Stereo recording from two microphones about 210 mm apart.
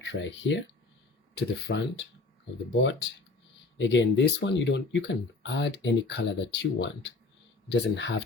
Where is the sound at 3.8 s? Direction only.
60° left (ahead or behind).